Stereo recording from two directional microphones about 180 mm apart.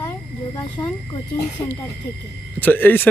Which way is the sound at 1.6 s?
15° left (ahead or behind).